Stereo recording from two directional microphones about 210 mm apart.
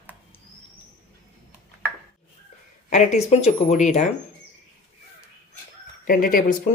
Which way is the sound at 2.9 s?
35° left (ahead or behind).